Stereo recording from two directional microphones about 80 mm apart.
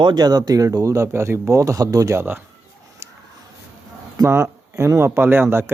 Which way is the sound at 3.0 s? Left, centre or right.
Right.